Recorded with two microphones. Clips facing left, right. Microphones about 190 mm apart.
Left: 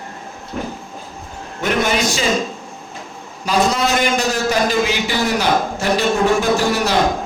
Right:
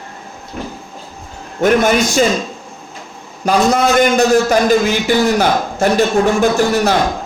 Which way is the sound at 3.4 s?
50° right (ahead or behind).